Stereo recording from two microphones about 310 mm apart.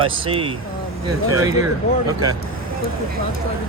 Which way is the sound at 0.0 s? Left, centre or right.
Centre.